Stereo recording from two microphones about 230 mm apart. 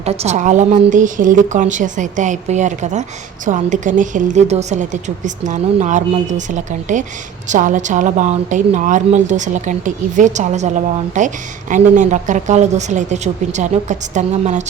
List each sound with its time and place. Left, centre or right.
0.0 s a woman's voice: right